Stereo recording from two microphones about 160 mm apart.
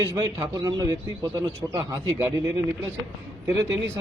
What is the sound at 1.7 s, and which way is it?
Speech, 20° right (ahead or behind).